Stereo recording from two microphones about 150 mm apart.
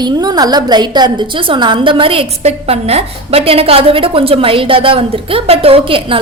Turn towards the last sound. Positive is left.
turn(degrees=-40)  # may be behind; listen again after turning